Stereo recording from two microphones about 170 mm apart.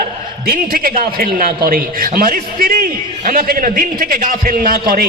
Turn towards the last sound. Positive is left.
turn(degrees=-55)  # may be behind; listen again after turning